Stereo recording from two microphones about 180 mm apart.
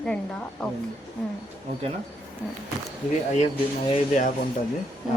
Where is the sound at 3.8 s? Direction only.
40° left (ahead or behind).